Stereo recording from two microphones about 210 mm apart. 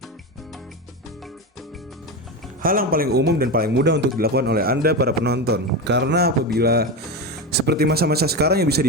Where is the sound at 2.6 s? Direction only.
45° right (ahead or behind).